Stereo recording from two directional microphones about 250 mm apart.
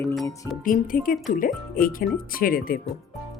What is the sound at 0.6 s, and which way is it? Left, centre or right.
Speech, left.